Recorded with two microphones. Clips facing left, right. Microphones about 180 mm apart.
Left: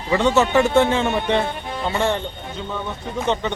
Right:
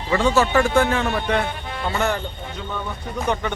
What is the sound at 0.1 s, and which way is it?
Speech, 20° left (ahead or behind).